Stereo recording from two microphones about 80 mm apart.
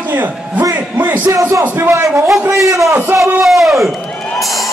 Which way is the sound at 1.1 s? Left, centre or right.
Right.